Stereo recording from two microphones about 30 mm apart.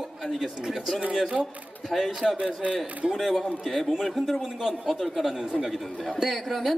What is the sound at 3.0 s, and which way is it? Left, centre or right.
Speech, right.